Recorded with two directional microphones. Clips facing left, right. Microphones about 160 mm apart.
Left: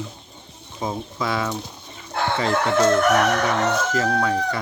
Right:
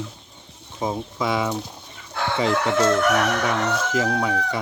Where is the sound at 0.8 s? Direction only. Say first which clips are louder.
Right 1 dB; 5° right (ahead or behind).